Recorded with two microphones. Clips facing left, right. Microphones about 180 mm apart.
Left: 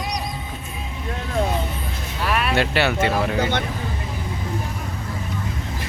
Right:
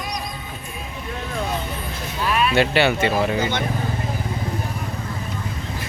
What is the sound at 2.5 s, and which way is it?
Speech, centre (ahead or behind).